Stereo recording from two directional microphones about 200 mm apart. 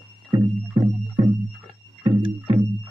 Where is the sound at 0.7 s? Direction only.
25° right (ahead or behind).